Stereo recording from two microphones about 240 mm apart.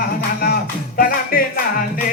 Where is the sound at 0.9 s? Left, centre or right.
Left.